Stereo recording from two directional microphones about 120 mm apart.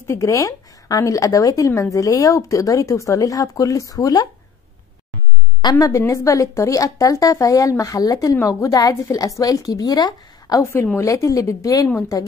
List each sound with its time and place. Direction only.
0.0 s a woman's voice: 25° left (ahead or behind)
5.6 s a woman's voice: 30° left (ahead or behind)
10.6 s a woman's voice: 25° left (ahead or behind)